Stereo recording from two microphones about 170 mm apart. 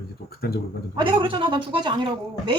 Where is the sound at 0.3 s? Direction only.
65° left (ahead or behind).